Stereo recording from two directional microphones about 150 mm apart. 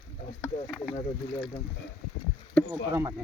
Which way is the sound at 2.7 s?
20° right (ahead or behind).